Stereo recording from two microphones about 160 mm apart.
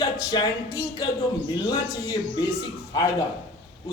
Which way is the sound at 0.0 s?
25° left (ahead or behind).